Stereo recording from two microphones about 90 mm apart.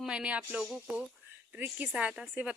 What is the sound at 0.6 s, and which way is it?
Speech, 5° right (ahead or behind).